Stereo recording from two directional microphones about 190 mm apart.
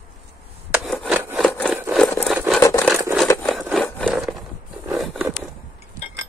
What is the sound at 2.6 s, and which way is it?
Wood, 15° left (ahead or behind).